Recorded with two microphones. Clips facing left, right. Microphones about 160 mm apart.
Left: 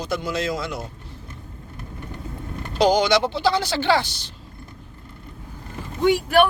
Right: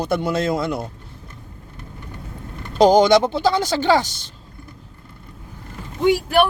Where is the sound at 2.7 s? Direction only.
45° right (ahead or behind).